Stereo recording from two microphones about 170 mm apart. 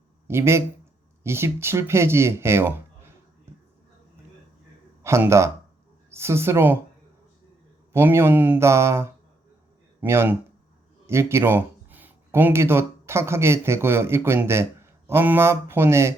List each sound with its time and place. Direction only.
0.3 s speech: 15° right (ahead or behind)
5.0 s speech: 15° right (ahead or behind)
7.9 s speech: 15° right (ahead or behind)